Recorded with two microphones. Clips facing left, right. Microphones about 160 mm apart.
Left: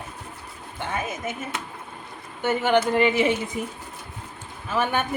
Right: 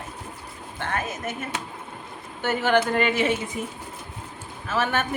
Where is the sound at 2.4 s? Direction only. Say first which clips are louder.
Left 1 dB; 10° left (ahead or behind).